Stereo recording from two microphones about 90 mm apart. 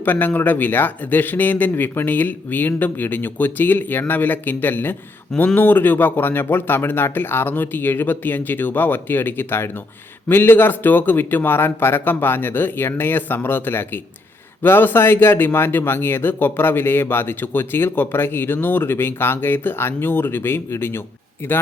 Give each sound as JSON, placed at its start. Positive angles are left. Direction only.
{"t": 0.0, "sound": "speech", "side_deg": 20}